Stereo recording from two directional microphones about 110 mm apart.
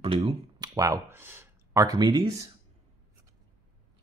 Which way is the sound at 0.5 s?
30° right (ahead or behind).